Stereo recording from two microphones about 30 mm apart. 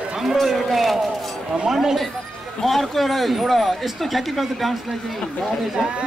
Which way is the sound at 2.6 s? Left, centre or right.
Centre.